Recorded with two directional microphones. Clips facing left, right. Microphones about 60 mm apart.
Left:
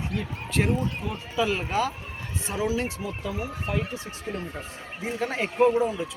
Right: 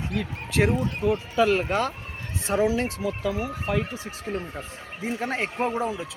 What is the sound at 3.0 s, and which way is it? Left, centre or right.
Speech, right.